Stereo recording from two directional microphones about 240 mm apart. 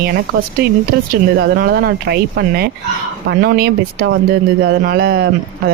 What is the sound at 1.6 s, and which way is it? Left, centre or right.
A woman's voice, right.